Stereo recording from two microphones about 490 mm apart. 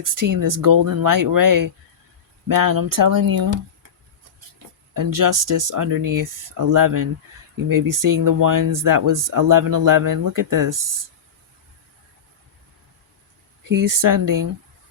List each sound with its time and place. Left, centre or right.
0.0 s speech: right
4.9 s speech: right
13.7 s speech: right